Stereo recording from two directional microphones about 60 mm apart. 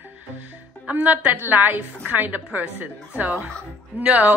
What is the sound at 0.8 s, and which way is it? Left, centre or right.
A woman's voice, right.